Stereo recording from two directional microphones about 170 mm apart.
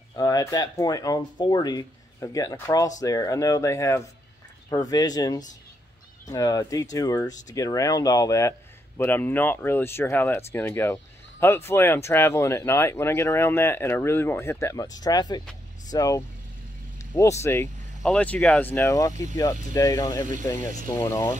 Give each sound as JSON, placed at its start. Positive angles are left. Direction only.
{"t": 0.2, "sound": "speech", "side_deg": 20}